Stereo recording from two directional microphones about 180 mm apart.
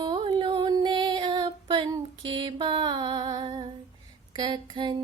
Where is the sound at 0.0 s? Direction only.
25° right (ahead or behind).